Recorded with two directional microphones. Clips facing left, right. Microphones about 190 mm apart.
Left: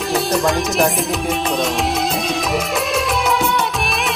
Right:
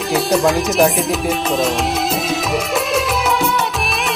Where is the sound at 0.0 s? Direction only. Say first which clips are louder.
Right 2 dB; centre (ahead or behind).